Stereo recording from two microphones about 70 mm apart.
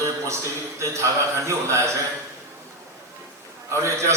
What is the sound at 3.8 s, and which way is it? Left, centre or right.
Speech, right.